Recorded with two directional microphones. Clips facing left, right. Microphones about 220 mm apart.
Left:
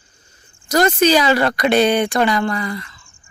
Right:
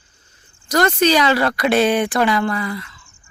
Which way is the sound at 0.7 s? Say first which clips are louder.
Left 2 dB; 10° left (ahead or behind).